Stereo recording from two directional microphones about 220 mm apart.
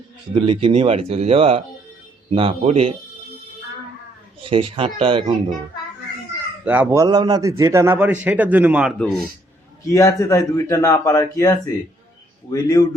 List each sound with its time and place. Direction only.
0.3 s speech: 25° right (ahead or behind)
4.4 s speech: 25° right (ahead or behind)
6.7 s a man's voice: 10° right (ahead or behind)
9.8 s a man's voice: 15° left (ahead or behind)